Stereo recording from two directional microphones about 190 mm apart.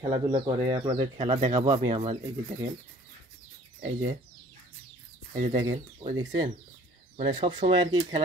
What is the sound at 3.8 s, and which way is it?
Speech, 30° right (ahead or behind).